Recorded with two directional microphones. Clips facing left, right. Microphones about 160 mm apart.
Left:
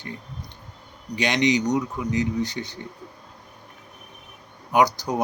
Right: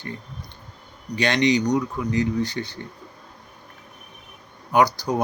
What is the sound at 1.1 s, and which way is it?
Speech, 15° left (ahead or behind).